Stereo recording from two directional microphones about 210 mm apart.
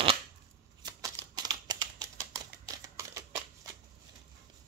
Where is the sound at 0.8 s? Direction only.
20° right (ahead or behind).